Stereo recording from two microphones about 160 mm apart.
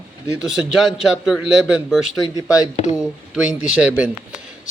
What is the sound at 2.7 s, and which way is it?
Speech, 40° left (ahead or behind).